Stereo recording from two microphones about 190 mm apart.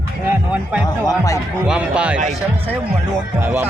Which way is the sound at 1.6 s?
5° right (ahead or behind).